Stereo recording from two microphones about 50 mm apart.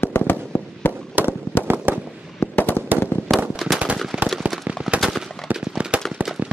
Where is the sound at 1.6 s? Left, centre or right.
Right.